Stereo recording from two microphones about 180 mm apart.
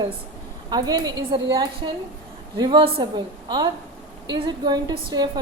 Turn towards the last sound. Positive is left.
turn(degrees=-25)  # may be behind; listen again after turning